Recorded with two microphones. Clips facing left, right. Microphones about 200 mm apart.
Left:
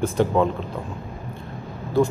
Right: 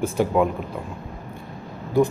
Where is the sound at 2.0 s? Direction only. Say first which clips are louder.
Right 1 dB; 15° right (ahead or behind).